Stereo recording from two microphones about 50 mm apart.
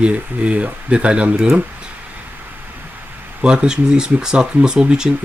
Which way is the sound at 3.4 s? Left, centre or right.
Centre.